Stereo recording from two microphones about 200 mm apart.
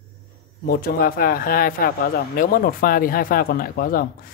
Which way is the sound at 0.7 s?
50° left (ahead or behind).